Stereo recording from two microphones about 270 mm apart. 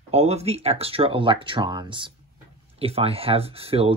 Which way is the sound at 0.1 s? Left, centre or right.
Right.